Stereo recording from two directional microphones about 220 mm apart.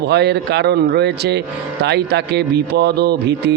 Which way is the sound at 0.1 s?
50° right (ahead or behind).